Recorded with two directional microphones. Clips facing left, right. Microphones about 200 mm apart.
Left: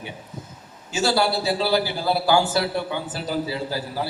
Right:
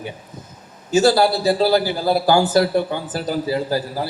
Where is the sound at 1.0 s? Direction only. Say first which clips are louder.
Right 4 dB; 50° right (ahead or behind).